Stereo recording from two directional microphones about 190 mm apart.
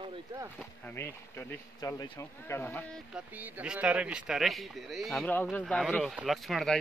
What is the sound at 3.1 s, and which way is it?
Speech, 5° right (ahead or behind).